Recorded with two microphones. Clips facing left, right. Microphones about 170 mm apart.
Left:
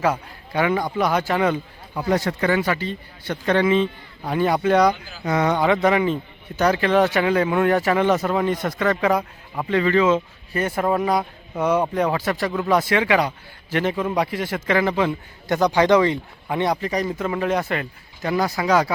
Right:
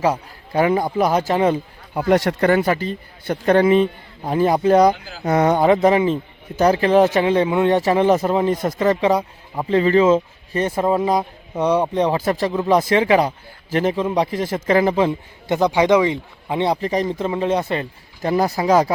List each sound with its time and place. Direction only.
0.5 s speech: 35° right (ahead or behind)
2.0 s speech: 65° right (ahead or behind)
2.4 s speech: 50° right (ahead or behind); by 7.8 s 20° right (ahead or behind)
7.8 s speech: 30° right (ahead or behind)
9.6 s speech: 35° right (ahead or behind)
15.5 s speech: 20° right (ahead or behind)